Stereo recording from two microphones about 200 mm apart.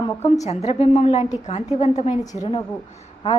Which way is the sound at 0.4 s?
35° left (ahead or behind).